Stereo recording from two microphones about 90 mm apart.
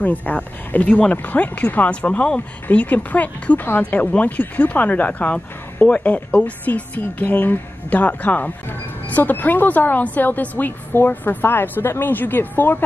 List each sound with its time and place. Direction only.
0.0 s speech: 15° left (ahead or behind)